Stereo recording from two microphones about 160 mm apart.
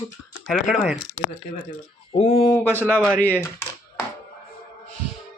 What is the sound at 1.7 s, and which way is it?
Speech, 40° left (ahead or behind).